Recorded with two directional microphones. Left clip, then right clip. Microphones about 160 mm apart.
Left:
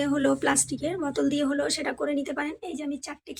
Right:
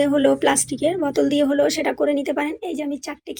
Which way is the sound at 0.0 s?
15° right (ahead or behind).